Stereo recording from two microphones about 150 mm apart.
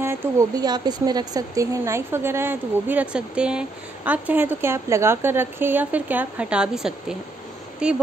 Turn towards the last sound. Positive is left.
turn(degrees=-5)  # may be behind; listen again after turning